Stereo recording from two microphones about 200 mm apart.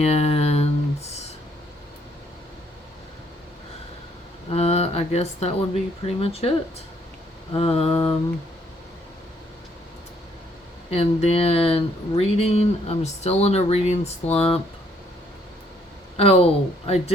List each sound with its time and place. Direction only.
0.0 s a sound: 30° left (ahead or behind)
4.5 s speech: 30° left (ahead or behind)
7.5 s speech: 30° left (ahead or behind)
10.9 s speech: 30° left (ahead or behind)
16.1 s speech: 30° left (ahead or behind)